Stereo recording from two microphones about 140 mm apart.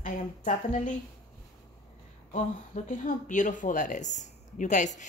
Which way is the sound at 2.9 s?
65° left (ahead or behind).